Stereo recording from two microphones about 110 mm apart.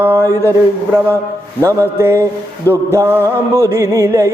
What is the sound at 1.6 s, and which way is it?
Music, 25° right (ahead or behind).